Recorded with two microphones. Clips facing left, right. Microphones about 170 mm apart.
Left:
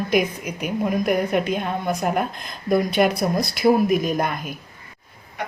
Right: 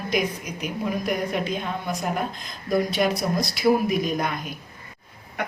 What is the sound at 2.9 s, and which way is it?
Speech, 55° left (ahead or behind).